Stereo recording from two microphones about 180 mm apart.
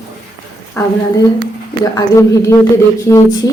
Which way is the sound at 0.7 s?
15° left (ahead or behind).